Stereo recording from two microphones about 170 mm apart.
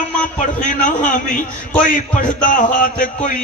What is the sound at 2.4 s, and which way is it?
Speech, 50° left (ahead or behind).